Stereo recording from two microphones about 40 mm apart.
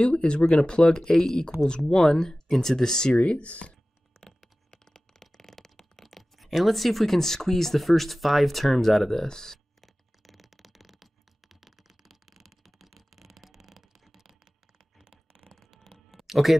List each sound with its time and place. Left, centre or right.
0.0 s speech: left
3.2 s speech: left
4.2 s a sound: centre
5.9 s speech: centre
10.2 s computer keyboard: centre
15.7 s a sound: centre